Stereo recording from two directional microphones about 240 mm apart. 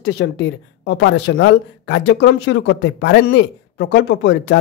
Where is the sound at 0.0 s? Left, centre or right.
Left.